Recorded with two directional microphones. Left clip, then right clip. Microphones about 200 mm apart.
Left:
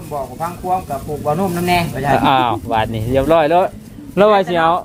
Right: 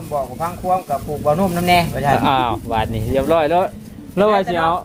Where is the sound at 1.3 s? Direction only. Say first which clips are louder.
Right 1 dB; 40° right (ahead or behind).